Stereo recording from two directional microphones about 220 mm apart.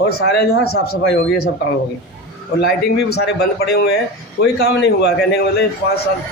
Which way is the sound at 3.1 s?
45° left (ahead or behind).